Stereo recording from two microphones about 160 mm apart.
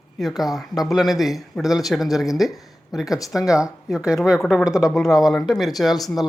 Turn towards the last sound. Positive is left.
turn(degrees=0)  # may be behind; listen again after turning